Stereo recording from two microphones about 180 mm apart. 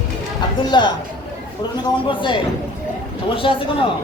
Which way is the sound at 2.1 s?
25° left (ahead or behind).